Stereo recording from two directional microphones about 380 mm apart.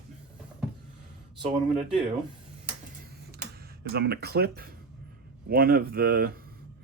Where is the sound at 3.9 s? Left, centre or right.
Right.